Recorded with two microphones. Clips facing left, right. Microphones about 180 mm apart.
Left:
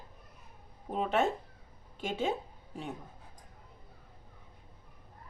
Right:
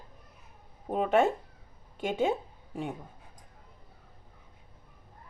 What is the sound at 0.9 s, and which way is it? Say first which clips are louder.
A woman's voice: right 5 dB; 50° right (ahead or behind).